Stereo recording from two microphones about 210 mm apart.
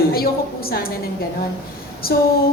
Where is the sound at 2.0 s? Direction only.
45° left (ahead or behind).